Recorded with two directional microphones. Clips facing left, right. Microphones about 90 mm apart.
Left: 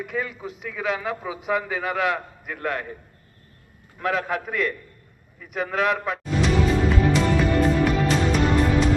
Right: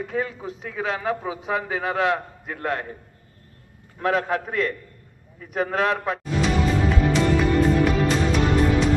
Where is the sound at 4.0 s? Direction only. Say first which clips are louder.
Right 2 dB; 30° right (ahead or behind).